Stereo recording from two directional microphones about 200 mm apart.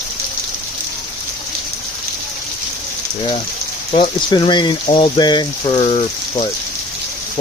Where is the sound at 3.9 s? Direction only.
25° left (ahead or behind).